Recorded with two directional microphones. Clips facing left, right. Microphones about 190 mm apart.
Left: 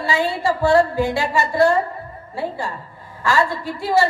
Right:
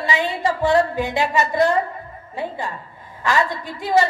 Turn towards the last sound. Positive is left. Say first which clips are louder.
# even
turn(degrees=-20)  # may be behind; listen again after turning